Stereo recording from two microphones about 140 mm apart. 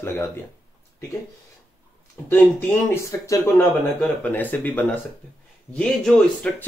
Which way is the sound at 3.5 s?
10° left (ahead or behind).